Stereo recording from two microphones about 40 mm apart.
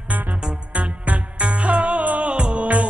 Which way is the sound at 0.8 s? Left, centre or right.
Right.